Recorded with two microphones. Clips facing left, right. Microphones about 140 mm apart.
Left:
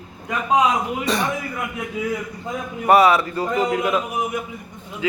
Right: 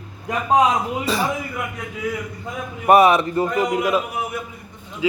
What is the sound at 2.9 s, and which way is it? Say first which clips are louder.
A man's voice: right 1 dB; 20° right (ahead or behind).